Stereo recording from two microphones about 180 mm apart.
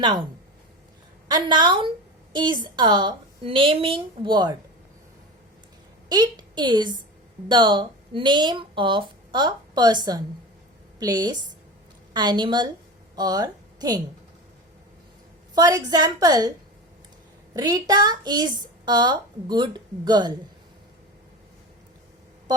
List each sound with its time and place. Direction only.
0.0 s speech: 25° right (ahead or behind)
1.3 s speech: 25° right (ahead or behind)
6.1 s a woman's voice: 25° right (ahead or behind)
15.5 s speech: 20° right (ahead or behind)
17.5 s speech: 20° right (ahead or behind)